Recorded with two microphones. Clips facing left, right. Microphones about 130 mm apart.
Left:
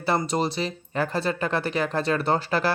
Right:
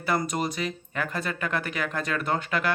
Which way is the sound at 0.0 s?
30° left (ahead or behind).